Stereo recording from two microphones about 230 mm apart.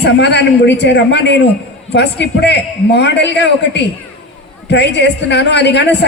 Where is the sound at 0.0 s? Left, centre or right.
Left.